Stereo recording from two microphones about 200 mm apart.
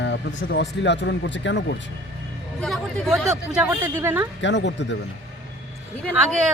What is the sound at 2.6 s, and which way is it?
Speech, centre (ahead or behind).